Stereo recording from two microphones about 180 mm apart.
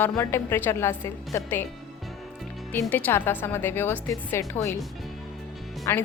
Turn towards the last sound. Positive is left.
turn(degrees=15)  # may be behind; listen again after turning